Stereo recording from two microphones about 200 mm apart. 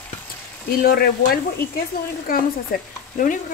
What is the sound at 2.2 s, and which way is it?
Speech, 45° left (ahead or behind).